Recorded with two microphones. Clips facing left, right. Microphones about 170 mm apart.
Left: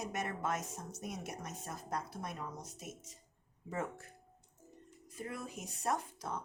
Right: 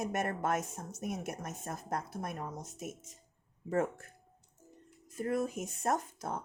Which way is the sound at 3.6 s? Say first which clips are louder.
Right 8 dB; 50° right (ahead or behind).